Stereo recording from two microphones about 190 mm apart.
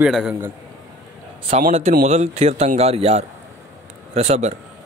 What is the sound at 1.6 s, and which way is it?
A man's voice, 40° right (ahead or behind).